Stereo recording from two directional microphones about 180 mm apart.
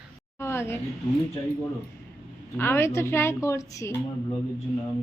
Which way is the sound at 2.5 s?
10° left (ahead or behind).